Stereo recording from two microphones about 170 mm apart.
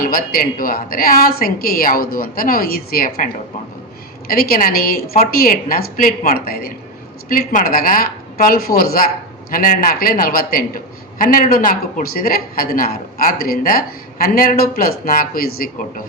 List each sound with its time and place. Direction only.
0.0 s a woman's voice: 60° left (ahead or behind)
4.3 s a woman's voice: 60° left (ahead or behind)